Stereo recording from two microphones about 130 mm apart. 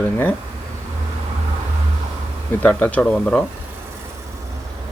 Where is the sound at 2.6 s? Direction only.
10° left (ahead or behind).